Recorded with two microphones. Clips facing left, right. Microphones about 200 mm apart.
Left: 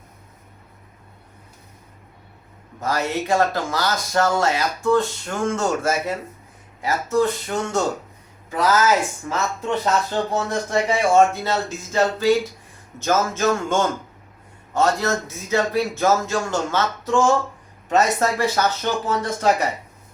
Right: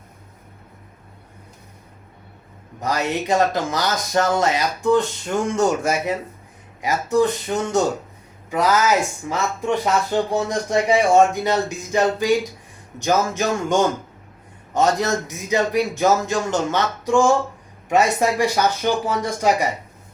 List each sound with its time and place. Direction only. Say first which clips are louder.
2.8 s speech: right 1 dB; 20° right (ahead or behind)